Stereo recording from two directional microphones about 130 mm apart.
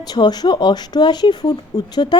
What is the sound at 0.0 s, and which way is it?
A woman's voice, 30° left (ahead or behind).